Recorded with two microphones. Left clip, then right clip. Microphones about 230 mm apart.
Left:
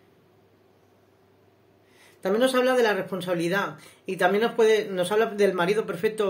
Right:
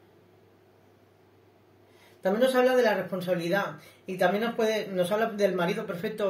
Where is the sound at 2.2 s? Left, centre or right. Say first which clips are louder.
Left 1 dB; left.